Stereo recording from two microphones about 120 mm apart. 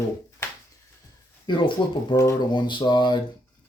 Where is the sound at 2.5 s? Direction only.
40° left (ahead or behind).